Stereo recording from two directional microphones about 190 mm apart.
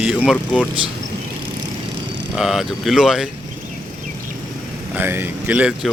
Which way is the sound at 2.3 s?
Centre (ahead or behind).